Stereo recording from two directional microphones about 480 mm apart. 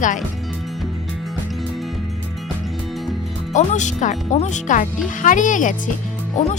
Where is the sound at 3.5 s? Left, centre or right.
Centre.